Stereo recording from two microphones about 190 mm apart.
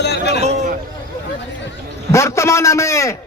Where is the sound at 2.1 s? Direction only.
15° left (ahead or behind).